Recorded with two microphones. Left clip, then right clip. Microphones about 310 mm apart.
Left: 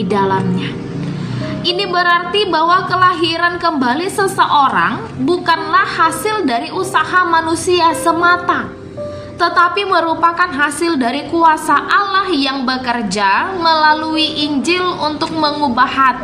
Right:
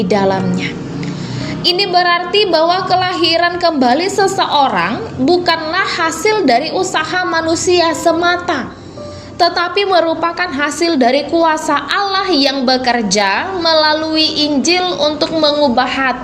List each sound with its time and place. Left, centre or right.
0.1 s a woman's voice: centre
1.6 s a woman's voice: centre